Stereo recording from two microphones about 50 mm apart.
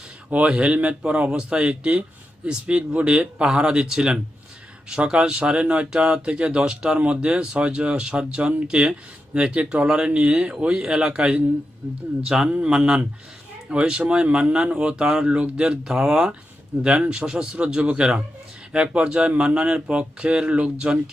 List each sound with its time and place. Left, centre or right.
0.3 s speech: right
9.8 s speech: centre
12.2 s speech: centre
12.5 s speech: right
12.7 s speech: centre